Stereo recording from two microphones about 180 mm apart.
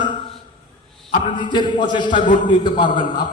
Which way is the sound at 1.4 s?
25° left (ahead or behind).